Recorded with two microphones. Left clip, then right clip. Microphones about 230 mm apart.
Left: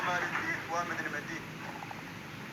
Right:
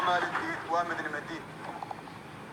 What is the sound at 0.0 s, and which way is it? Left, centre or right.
Vehicle, right.